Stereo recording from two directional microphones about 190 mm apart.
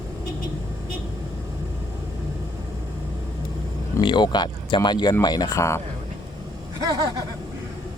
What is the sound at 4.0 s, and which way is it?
Speech, 25° left (ahead or behind).